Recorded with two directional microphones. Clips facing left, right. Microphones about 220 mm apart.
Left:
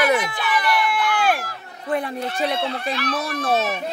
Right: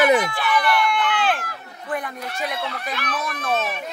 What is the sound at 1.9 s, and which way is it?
Speech, 30° left (ahead or behind).